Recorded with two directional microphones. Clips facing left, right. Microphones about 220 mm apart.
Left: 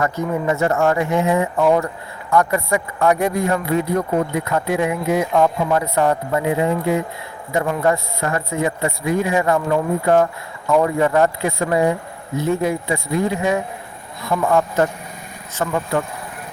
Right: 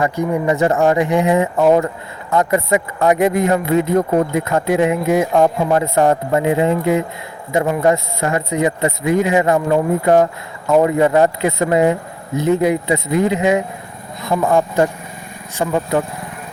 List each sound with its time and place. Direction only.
0.0 s speech: 15° right (ahead or behind)